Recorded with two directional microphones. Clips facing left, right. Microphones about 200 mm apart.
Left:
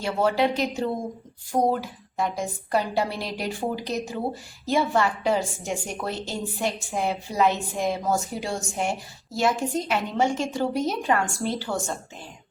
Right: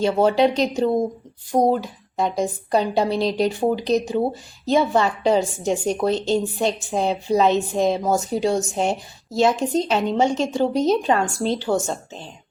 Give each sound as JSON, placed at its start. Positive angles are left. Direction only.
{"t": 0.0, "sound": "a woman's voice", "side_deg": -20}